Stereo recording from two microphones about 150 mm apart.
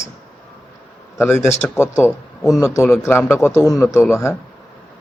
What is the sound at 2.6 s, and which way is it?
A man's voice, 20° left (ahead or behind).